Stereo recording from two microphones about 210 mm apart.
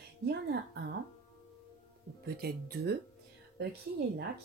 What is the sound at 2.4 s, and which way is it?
Speech, 45° right (ahead or behind).